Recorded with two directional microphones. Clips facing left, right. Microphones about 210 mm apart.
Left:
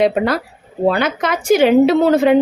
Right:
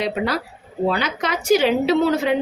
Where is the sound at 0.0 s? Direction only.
55° left (ahead or behind).